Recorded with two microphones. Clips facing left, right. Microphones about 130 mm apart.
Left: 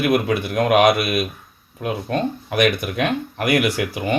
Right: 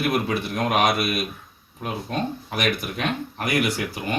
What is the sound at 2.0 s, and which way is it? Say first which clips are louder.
Speech: left 4 dB; 60° left (ahead or behind).